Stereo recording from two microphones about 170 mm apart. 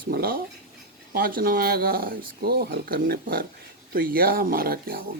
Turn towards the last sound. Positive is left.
turn(degrees=-60)  # may be behind; listen again after turning